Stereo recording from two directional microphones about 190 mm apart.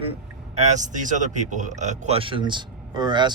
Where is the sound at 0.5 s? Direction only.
40° right (ahead or behind).